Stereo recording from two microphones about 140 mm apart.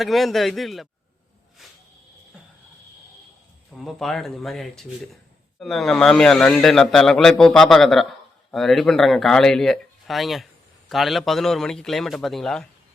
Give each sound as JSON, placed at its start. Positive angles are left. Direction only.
{"t": 0.0, "sound": "speech", "side_deg": 0}
{"t": 3.7, "sound": "speech", "side_deg": 0}